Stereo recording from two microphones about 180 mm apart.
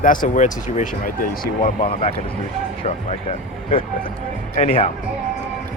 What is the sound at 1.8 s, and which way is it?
Speech, 35° left (ahead or behind).